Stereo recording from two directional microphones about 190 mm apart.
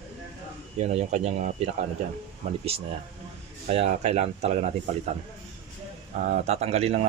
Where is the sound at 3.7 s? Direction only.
35° right (ahead or behind).